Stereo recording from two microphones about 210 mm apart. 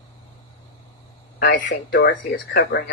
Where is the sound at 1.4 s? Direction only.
45° left (ahead or behind).